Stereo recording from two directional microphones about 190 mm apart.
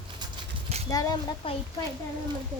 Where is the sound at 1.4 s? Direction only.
30° left (ahead or behind).